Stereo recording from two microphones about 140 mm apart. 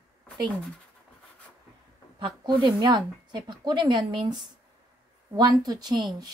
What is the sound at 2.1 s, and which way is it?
A woman's voice, 35° right (ahead or behind).